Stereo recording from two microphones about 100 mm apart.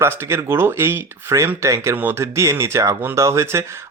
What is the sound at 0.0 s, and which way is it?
Speech, 25° right (ahead or behind).